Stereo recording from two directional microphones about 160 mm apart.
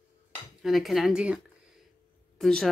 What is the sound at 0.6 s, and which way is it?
Speech, centre (ahead or behind).